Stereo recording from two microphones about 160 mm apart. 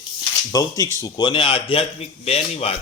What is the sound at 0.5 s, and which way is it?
Speech, 20° left (ahead or behind).